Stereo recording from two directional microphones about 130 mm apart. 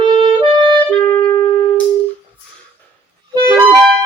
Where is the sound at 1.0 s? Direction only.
25° left (ahead or behind).